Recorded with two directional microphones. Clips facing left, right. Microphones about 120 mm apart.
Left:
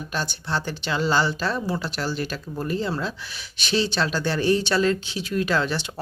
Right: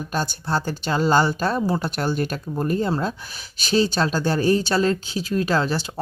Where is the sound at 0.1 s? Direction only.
45° right (ahead or behind).